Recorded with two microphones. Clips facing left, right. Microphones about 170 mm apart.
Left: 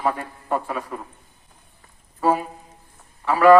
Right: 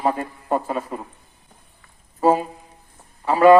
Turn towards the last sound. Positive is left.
turn(degrees=-25)  # may be behind; listen again after turning